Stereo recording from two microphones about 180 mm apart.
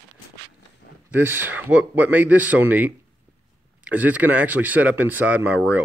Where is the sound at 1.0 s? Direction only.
10° right (ahead or behind).